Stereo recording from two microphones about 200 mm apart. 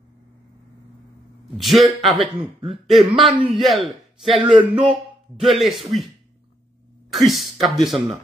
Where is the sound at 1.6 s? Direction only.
Centre (ahead or behind).